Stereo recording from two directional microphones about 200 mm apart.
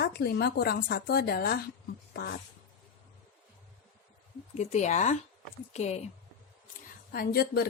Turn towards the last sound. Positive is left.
turn(degrees=50)  # may be behind; listen again after turning